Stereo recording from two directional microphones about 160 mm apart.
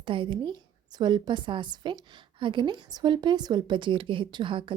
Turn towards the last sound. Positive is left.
turn(degrees=-30)  # may be behind; listen again after turning